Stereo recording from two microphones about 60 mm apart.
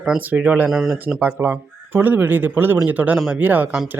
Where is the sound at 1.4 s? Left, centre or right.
Right.